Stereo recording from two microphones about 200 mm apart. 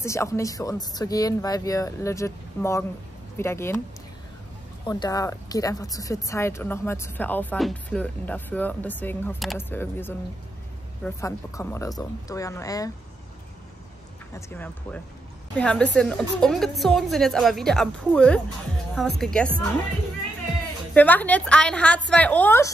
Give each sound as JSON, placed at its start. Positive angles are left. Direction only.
{"t": 0.0, "sound": "speech", "side_deg": 15}
{"t": 4.8, "sound": "speech", "side_deg": 20}
{"t": 14.3, "sound": "a woman's voice", "side_deg": 10}
{"t": 20.9, "sound": "speech", "side_deg": 10}